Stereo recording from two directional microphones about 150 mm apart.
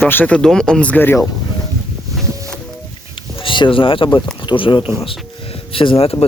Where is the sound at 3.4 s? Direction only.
35° left (ahead or behind).